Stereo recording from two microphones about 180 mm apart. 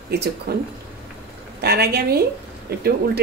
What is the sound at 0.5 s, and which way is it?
A woman's voice, 60° right (ahead or behind).